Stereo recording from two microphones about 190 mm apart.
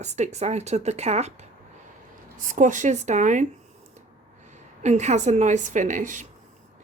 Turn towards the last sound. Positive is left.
turn(degrees=-40)  # may be behind; listen again after turning